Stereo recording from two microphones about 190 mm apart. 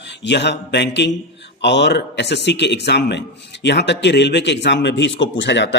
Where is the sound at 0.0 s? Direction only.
65° left (ahead or behind).